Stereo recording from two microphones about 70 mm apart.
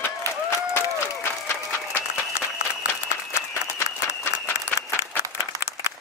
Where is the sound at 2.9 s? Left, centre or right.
Left.